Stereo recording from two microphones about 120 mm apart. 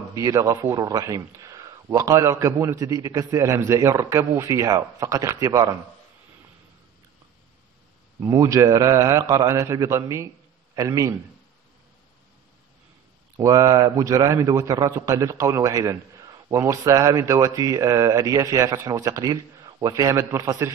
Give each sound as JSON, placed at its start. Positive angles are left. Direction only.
{"t": 0.1, "sound": "a man's voice", "side_deg": -25}
{"t": 8.2, "sound": "a man's voice", "side_deg": -25}
{"t": 13.4, "sound": "a man's voice", "side_deg": -30}